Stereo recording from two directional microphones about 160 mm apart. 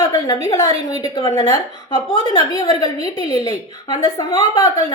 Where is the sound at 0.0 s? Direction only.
20° left (ahead or behind).